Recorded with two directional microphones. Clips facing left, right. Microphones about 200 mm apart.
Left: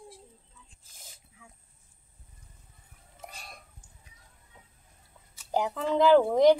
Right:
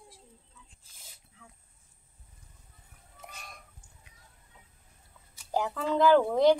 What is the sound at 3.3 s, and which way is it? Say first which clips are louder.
Chicken: left 1 dB; 35° left (ahead or behind).